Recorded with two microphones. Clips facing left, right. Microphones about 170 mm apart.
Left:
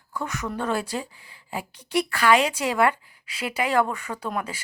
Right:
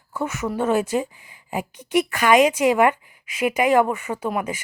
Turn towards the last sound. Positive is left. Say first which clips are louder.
# right 5 dB
turn(degrees=-10)  # may be behind; listen again after turning